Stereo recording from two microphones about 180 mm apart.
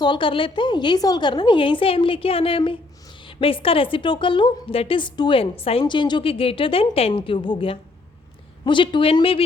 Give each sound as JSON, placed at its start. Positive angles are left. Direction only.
{"t": 0.0, "sound": "a woman's voice", "side_deg": 25}